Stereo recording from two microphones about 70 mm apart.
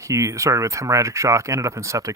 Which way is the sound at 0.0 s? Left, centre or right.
Right.